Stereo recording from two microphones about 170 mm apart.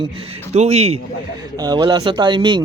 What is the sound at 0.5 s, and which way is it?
Speech, 40° right (ahead or behind).